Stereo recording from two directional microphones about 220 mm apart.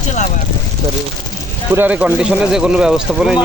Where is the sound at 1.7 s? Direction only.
5° right (ahead or behind).